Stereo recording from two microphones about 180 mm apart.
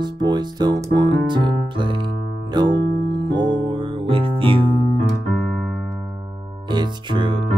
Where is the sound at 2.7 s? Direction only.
70° right (ahead or behind).